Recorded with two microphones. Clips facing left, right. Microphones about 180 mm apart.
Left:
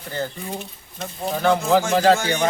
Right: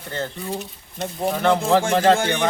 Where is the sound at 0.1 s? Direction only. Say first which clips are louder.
Even; 5° left (ahead or behind).